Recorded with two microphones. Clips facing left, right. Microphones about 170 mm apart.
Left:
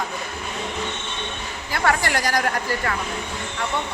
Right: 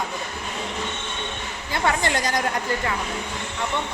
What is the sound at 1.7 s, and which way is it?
Speech, 20° right (ahead or behind).